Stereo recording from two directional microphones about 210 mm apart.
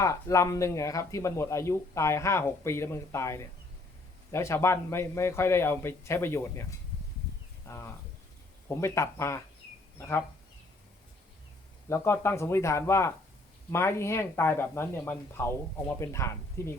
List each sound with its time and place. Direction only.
0.0 s speech: 15° left (ahead or behind)
7.7 s speech: 10° left (ahead or behind)
11.9 s speech: 10° left (ahead or behind)